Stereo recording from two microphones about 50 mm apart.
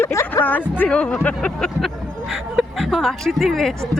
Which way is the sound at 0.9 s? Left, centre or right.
Centre.